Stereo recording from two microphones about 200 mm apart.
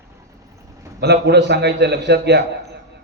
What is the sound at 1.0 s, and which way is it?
A man's voice, 55° right (ahead or behind).